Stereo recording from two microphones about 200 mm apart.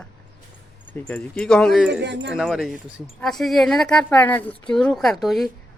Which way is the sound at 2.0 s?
65° right (ahead or behind).